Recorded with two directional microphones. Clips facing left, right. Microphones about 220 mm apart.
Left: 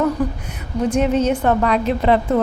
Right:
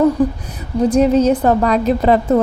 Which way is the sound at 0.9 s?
35° right (ahead or behind).